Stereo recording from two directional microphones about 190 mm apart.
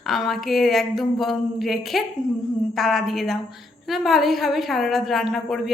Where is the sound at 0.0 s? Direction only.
Centre (ahead or behind).